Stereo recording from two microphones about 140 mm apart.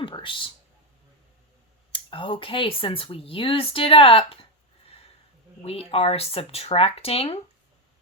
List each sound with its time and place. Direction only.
0.0 s a sound: 35° left (ahead or behind)
1.9 s speech: 35° left (ahead or behind)
5.6 s speech: 45° left (ahead or behind)